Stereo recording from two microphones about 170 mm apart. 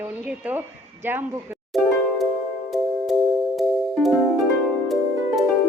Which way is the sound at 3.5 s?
Centre (ahead or behind).